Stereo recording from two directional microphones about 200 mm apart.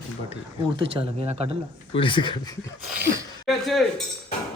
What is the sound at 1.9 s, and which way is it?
Speech, 25° left (ahead or behind).